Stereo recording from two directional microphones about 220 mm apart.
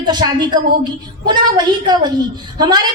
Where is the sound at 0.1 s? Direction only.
20° right (ahead or behind).